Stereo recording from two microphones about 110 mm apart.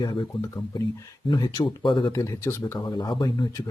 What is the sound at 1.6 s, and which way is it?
Speech, 50° left (ahead or behind).